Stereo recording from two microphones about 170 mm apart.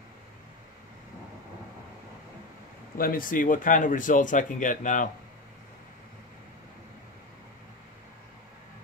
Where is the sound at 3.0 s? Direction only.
55° left (ahead or behind).